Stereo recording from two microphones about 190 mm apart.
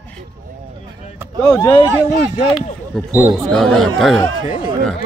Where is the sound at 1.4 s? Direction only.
20° left (ahead or behind).